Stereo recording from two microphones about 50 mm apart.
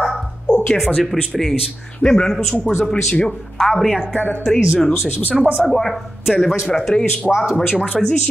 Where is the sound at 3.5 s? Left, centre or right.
Centre.